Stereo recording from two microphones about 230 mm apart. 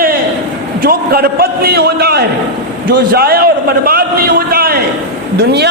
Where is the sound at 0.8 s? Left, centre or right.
Right.